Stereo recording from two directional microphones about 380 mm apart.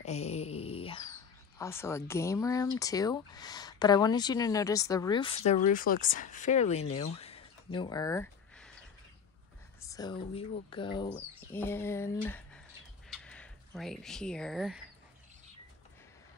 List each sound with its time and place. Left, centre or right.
0.0 s wail: centre
1.6 s speech: centre
9.8 s speech: centre